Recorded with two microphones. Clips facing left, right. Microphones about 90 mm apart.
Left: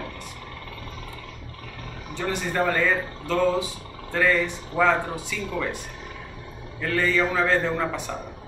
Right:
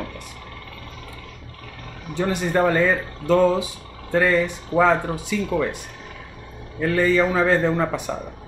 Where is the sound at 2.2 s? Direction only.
20° right (ahead or behind).